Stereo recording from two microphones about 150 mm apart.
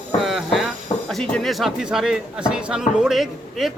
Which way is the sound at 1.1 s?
5° left (ahead or behind).